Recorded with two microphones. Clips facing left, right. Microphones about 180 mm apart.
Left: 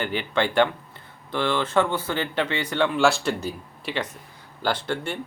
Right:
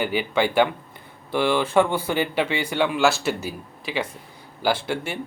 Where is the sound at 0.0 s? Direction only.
10° right (ahead or behind).